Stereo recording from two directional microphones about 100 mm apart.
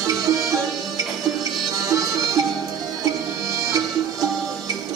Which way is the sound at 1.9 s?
35° right (ahead or behind).